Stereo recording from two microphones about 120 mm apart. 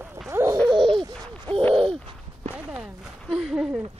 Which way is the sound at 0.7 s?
45° right (ahead or behind).